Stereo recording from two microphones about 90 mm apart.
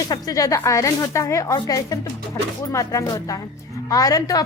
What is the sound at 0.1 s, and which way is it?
A woman's voice, 40° left (ahead or behind).